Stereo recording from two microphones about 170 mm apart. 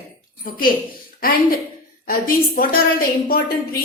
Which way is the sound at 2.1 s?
55° left (ahead or behind).